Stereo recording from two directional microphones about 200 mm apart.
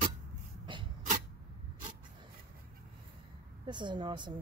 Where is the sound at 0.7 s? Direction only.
25° right (ahead or behind).